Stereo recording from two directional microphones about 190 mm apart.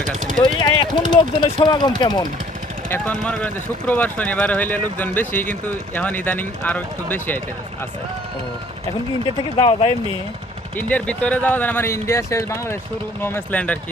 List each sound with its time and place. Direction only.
0.4 s speech: 25° left (ahead or behind)
2.9 s speech: 5° left (ahead or behind)
9.6 s speech: 25° left (ahead or behind)
10.8 s speech: 10° left (ahead or behind)